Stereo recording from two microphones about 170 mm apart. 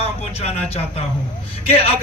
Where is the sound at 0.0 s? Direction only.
35° left (ahead or behind).